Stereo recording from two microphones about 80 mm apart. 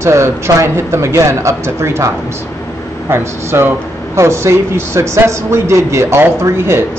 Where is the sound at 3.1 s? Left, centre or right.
Right.